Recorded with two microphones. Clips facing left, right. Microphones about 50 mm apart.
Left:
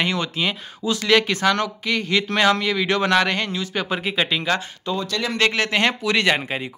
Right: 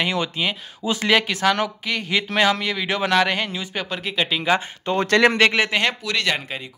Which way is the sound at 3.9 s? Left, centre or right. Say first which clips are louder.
Left 1 dB; centre.